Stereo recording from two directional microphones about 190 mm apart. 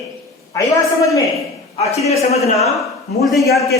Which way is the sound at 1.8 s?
35° left (ahead or behind).